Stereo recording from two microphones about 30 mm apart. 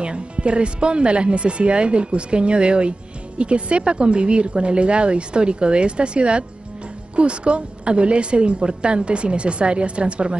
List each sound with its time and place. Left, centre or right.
0.0 s a woman's voice: right